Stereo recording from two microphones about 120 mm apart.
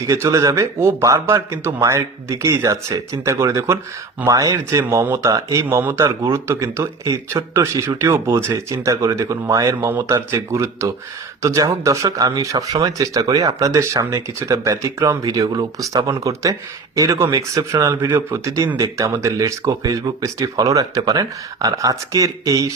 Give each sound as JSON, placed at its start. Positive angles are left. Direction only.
{"t": 0.1, "sound": "speech", "side_deg": -25}